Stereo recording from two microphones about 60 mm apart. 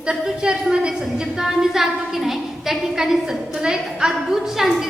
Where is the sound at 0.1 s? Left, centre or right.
Centre.